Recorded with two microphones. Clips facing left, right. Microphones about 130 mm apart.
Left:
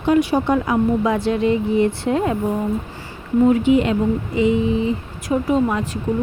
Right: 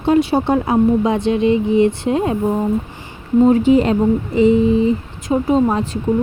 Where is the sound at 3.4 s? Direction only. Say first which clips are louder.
Right 3 dB; 35° right (ahead or behind).